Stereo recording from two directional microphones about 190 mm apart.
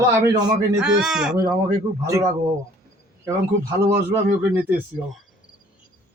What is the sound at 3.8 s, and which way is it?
Speech, 10° right (ahead or behind).